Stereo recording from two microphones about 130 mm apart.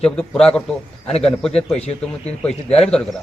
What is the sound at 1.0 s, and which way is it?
Speech, 50° left (ahead or behind).